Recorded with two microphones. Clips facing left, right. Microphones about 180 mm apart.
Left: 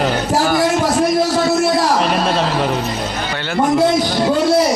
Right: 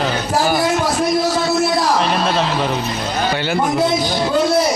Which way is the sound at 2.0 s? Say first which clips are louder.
Left 1 dB; centre (ahead or behind).